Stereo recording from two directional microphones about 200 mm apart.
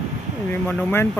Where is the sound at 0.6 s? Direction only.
10° left (ahead or behind).